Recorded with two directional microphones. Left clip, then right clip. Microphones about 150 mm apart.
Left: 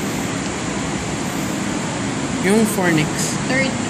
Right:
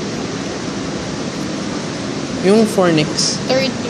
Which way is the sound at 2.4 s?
40° right (ahead or behind).